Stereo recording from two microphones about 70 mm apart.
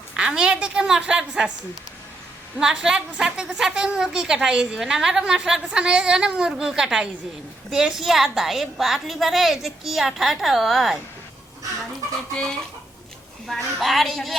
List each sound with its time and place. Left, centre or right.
0.1 s a woman's voice: centre
2.6 s a woman's voice: centre
13.5 s a woman's voice: centre